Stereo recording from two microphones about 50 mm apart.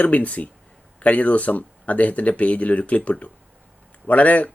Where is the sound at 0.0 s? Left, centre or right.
Left.